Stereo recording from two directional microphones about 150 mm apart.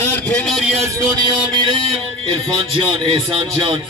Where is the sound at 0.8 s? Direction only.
25° right (ahead or behind).